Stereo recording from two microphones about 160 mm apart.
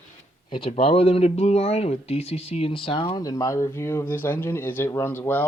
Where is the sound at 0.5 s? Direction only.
35° left (ahead or behind).